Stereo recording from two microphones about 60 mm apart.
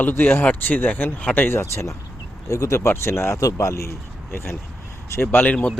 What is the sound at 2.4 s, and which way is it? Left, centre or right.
Speech, left.